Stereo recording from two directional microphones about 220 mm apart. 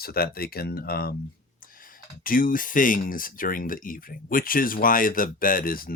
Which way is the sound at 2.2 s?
40° left (ahead or behind).